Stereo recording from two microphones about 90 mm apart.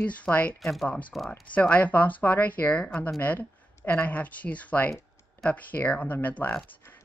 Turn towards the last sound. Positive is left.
turn(degrees=20)  # may be behind; listen again after turning